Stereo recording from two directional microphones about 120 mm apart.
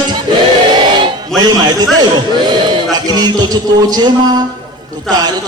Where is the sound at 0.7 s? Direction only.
40° right (ahead or behind).